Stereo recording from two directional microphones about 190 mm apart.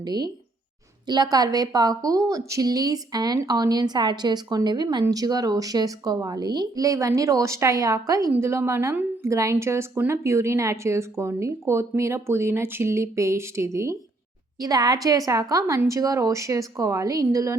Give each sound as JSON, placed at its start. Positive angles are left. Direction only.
{"t": 0.0, "sound": "a woman's voice", "side_deg": -20}